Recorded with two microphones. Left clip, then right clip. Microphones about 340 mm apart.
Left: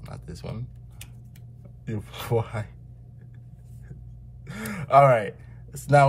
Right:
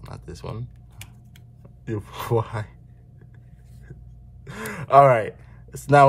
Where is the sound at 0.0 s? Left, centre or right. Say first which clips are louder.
Right 3 dB; centre.